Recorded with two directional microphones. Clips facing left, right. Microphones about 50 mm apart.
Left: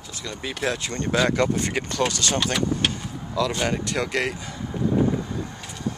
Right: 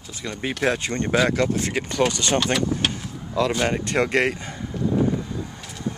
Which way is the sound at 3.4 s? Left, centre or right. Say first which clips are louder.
Right 2 dB; right.